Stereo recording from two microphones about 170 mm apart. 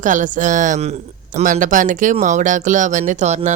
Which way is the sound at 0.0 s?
50° right (ahead or behind).